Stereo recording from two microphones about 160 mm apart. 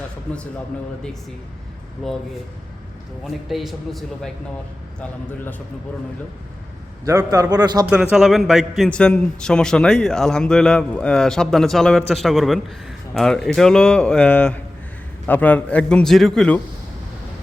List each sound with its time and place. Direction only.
3.2 s a man's voice: centre (ahead or behind)
7.0 s a man's voice: 20° right (ahead or behind)
8.1 s a man's voice: centre (ahead or behind)